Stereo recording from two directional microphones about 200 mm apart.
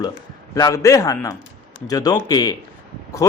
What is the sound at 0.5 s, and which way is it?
A man's voice, 15° left (ahead or behind).